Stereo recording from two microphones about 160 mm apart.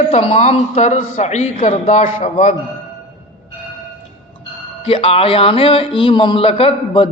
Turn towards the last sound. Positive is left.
turn(degrees=35)  # may be behind; listen again after turning